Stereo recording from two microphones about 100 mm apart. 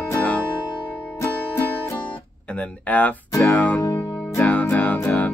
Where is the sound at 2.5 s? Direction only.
15° left (ahead or behind).